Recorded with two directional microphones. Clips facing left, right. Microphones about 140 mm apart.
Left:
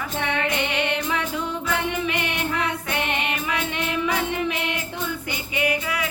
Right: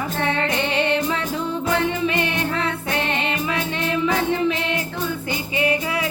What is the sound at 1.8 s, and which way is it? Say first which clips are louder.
Music: right 4 dB; 15° left (ahead or behind).